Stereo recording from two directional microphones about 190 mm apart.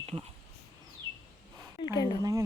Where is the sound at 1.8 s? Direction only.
20° left (ahead or behind).